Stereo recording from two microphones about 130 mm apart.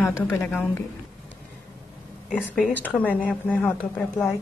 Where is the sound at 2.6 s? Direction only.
10° left (ahead or behind).